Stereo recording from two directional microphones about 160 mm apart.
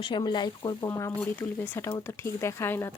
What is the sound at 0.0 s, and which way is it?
Speech, 30° left (ahead or behind).